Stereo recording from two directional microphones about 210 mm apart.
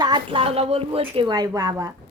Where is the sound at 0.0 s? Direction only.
20° right (ahead or behind).